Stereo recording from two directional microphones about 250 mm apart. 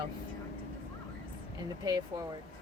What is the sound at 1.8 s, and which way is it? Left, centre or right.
Speech, centre.